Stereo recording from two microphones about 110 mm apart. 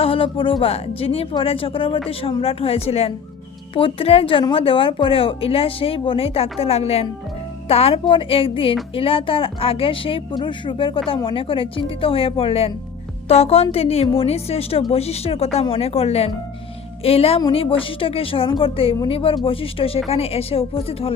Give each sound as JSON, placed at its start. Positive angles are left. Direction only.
{"t": 0.0, "sound": "speech", "side_deg": 55}
{"t": 3.8, "sound": "speech", "side_deg": 55}
{"t": 13.2, "sound": "a woman's voice", "side_deg": 70}